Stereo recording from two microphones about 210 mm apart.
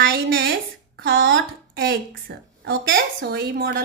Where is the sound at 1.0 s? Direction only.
65° right (ahead or behind); by 2.0 s 50° right (ahead or behind).